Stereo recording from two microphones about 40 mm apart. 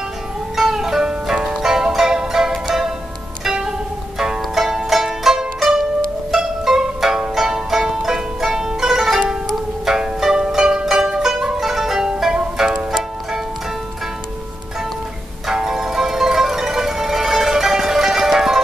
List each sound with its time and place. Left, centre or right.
0.6 s music: centre
11.6 s zither: centre
12.5 s music: centre
15.5 s music: centre